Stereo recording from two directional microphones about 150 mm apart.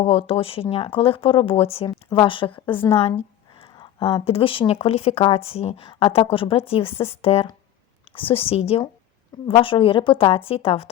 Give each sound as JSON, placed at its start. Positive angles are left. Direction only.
{"t": 0.0, "sound": "speech", "side_deg": 40}
{"t": 2.9, "sound": "a sound", "side_deg": 40}
{"t": 3.8, "sound": "speech", "side_deg": 30}